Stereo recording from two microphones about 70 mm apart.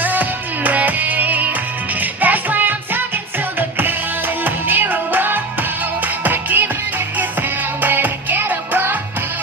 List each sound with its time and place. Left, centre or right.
0.0 s music: right
7.8 s music: right